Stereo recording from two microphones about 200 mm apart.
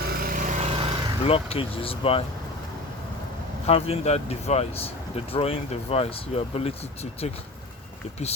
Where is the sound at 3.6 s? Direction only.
30° left (ahead or behind).